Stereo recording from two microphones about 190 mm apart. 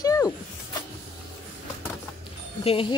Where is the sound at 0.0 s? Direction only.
20° left (ahead or behind).